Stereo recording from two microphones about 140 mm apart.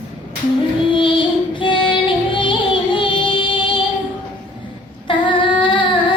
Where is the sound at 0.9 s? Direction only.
35° left (ahead or behind).